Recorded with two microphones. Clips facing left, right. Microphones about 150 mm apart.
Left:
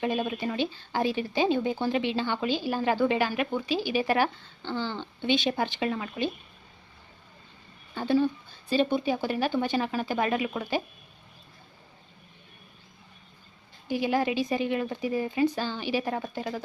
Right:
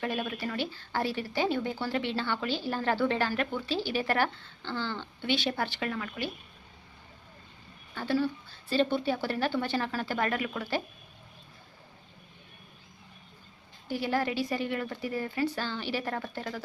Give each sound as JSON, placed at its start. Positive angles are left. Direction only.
{"t": 0.0, "sound": "speech", "side_deg": 15}
{"t": 7.9, "sound": "speech", "side_deg": 20}
{"t": 13.8, "sound": "speech", "side_deg": 15}